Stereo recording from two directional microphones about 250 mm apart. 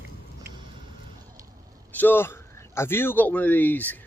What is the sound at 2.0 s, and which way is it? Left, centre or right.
Speech, centre.